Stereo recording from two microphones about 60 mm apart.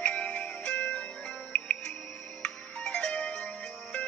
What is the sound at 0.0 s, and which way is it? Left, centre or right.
Music, left.